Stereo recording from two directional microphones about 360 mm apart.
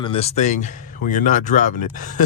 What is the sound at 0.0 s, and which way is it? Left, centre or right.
Speech, centre.